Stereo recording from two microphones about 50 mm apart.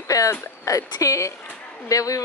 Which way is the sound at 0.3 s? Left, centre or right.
Left.